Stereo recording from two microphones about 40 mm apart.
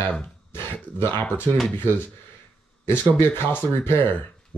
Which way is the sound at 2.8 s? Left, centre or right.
Left.